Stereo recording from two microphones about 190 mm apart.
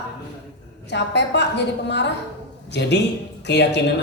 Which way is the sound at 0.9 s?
65° left (ahead or behind).